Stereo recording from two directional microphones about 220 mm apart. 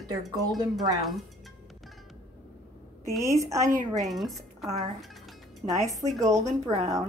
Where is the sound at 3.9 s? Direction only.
Centre (ahead or behind).